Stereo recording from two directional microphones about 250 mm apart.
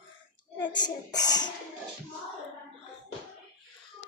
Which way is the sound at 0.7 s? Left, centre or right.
Centre.